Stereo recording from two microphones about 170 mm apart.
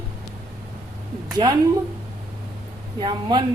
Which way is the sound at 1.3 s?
25° right (ahead or behind).